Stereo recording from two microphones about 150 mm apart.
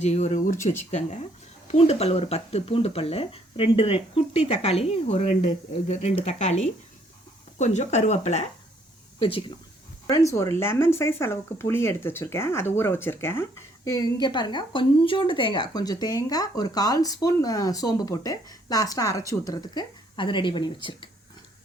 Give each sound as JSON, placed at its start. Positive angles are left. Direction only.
{"t": 0.0, "sound": "speech", "side_deg": 50}
{"t": 0.9, "sound": "speech", "side_deg": 50}
{"t": 9.1, "sound": "speech", "side_deg": 35}
{"t": 10.1, "sound": "speech", "side_deg": 20}